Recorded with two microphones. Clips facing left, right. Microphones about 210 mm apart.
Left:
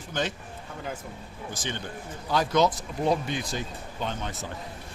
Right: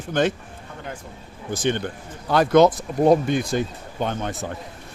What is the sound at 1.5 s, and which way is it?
Speech, 60° right (ahead or behind).